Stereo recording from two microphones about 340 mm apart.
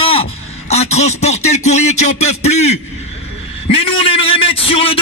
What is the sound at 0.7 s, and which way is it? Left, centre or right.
A man's voice, centre.